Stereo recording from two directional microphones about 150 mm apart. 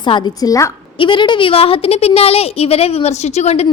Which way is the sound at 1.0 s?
35° left (ahead or behind).